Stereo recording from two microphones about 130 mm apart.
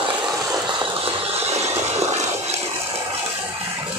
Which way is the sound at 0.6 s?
50° right (ahead or behind).